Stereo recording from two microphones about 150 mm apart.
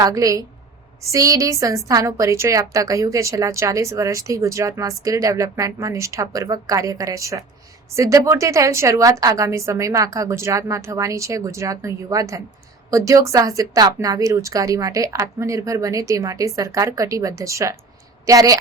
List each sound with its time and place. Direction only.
0.0 s a woman's voice: 20° right (ahead or behind)